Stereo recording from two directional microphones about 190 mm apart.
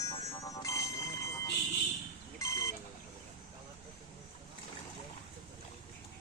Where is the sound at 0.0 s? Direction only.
20° left (ahead or behind).